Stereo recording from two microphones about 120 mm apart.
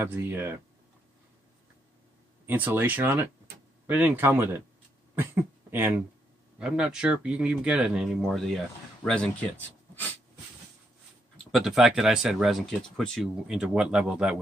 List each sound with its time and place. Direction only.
0.0 s speech: 15° right (ahead or behind)
2.4 s speech: 15° right (ahead or behind)
6.6 s speech: 5° right (ahead or behind)
11.5 s speech: 5° right (ahead or behind)